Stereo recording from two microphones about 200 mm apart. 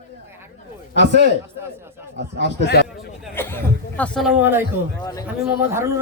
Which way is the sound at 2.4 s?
55° left (ahead or behind).